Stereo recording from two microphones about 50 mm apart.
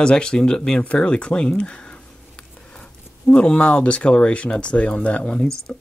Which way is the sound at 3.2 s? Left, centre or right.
Left.